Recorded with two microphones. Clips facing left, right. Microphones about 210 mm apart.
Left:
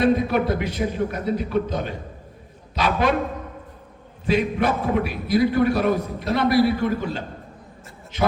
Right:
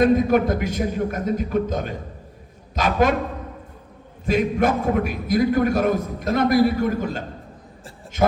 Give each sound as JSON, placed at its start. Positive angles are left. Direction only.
{"t": 0.0, "sound": "a man's voice", "side_deg": -45}
{"t": 4.3, "sound": "a man's voice", "side_deg": -45}